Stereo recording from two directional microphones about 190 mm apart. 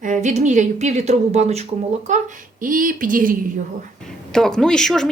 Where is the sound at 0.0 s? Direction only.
40° right (ahead or behind).